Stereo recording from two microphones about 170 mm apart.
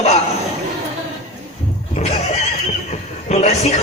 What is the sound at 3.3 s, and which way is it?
Speech, 40° left (ahead or behind).